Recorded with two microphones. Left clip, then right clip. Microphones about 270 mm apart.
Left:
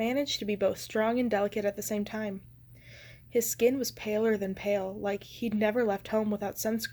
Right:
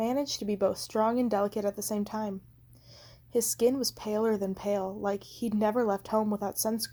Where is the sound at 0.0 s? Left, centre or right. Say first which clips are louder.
Even; right.